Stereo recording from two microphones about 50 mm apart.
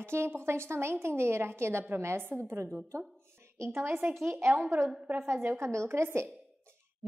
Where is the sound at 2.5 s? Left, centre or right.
Right.